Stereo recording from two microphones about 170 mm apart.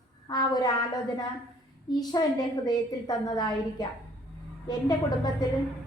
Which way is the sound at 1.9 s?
25° left (ahead or behind).